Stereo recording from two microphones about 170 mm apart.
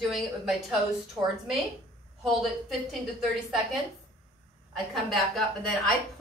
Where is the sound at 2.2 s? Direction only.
Centre (ahead or behind).